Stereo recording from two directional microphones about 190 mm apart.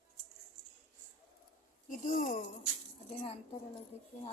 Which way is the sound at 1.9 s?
45° left (ahead or behind).